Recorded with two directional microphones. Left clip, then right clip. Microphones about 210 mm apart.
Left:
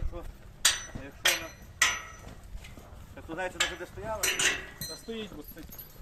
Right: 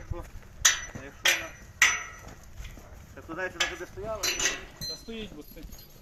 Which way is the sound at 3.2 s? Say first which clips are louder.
Right 1 dB; 60° left (ahead or behind).